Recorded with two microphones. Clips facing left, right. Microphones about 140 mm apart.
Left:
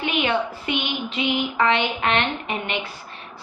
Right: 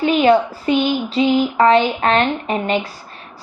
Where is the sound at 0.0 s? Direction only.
40° right (ahead or behind).